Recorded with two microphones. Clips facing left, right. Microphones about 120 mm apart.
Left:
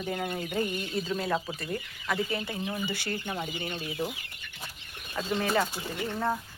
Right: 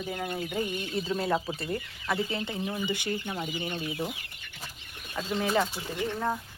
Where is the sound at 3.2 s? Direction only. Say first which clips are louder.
Even; centre (ahead or behind).